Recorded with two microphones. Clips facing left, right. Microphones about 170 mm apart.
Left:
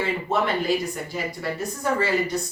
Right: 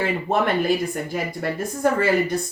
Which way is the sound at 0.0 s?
55° right (ahead or behind).